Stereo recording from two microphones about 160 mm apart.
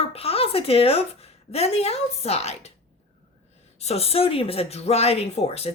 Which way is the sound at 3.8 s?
40° left (ahead or behind).